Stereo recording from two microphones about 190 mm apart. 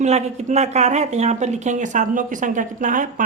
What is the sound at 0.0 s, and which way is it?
Speech, 35° right (ahead or behind).